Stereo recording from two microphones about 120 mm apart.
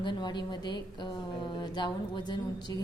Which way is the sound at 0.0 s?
35° left (ahead or behind).